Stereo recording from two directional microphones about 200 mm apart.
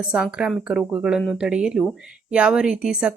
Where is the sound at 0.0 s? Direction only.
5° right (ahead or behind).